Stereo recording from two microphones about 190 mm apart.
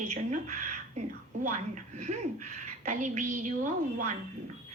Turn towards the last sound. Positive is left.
turn(degrees=-40)  # may be behind; listen again after turning